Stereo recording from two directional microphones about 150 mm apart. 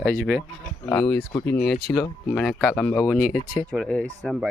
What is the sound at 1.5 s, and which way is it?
Speech, 90° left.